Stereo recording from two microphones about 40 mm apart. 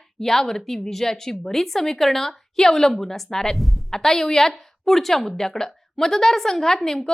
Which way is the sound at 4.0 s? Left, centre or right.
Centre.